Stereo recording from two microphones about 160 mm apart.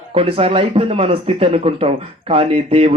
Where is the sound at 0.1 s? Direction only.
35° right (ahead or behind).